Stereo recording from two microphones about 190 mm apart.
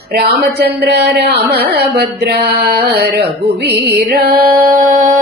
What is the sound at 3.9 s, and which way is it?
Music, 55° right (ahead or behind).